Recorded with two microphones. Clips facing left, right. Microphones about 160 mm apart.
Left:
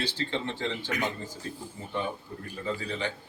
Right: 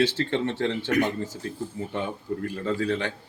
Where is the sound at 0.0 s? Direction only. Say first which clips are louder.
Right 8 dB; 70° right (ahead or behind).